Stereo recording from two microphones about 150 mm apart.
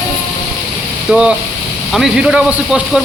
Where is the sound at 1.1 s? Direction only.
5° right (ahead or behind).